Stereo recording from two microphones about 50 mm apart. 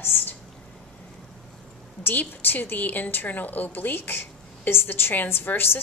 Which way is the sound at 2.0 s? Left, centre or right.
Left.